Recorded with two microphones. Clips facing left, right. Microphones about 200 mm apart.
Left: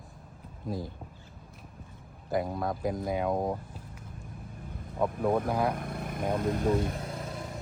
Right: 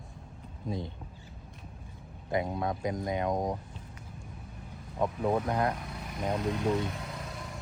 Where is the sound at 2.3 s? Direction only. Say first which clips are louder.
Left 1 dB; centre (ahead or behind).